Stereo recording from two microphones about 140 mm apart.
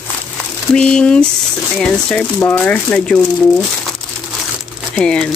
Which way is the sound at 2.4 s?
10° left (ahead or behind).